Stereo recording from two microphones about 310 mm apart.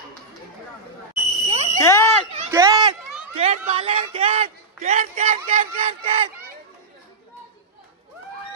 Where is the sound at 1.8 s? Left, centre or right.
Centre.